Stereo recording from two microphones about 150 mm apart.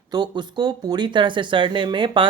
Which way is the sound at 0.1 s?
30° right (ahead or behind).